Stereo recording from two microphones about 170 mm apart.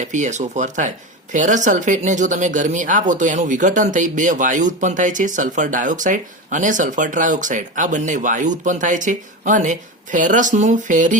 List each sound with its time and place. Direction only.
0.0 s speech: 45° right (ahead or behind)